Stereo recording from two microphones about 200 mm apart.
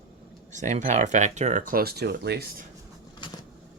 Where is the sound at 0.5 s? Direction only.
35° right (ahead or behind); by 2.5 s 55° right (ahead or behind).